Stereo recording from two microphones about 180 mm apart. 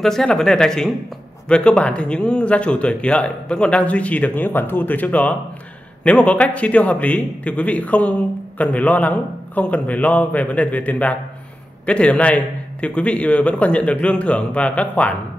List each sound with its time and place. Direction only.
0.0 s speech: 5° left (ahead or behind)